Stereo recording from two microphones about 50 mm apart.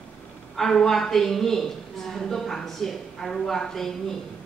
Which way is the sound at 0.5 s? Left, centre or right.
Centre.